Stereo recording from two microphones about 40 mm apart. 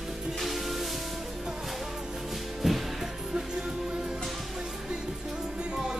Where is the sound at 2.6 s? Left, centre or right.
Centre.